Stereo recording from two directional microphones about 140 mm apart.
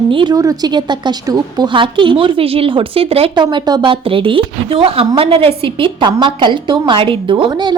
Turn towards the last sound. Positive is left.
turn(degrees=-30)  # may be behind; listen again after turning